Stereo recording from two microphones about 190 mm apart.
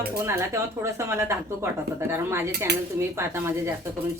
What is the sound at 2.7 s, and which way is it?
Speech, 60° right (ahead or behind).